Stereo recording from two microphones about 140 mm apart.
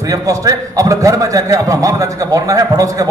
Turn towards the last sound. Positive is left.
turn(degrees=-25)  # may be behind; listen again after turning